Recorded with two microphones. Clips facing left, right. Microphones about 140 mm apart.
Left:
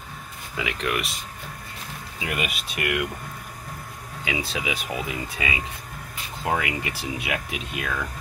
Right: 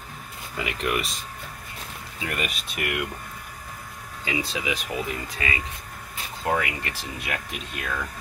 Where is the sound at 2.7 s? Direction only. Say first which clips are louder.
Left 4 dB; centre (ahead or behind).